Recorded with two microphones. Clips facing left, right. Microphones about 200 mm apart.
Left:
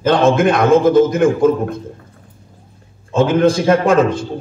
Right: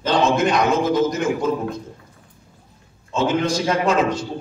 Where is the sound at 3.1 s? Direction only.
55° left (ahead or behind).